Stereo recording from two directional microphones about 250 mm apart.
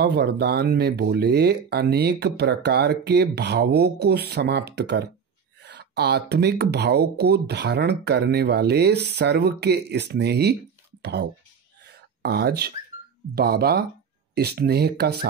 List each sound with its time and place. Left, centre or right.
0.0 s speech: right
11.9 s a sound: right
13.3 s speech: right